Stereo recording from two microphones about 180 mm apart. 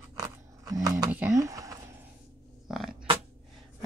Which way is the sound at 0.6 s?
20° right (ahead or behind).